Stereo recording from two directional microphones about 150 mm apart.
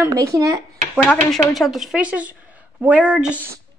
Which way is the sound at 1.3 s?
Centre (ahead or behind).